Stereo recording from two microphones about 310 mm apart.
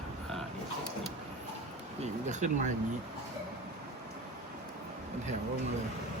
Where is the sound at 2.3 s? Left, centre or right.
Right.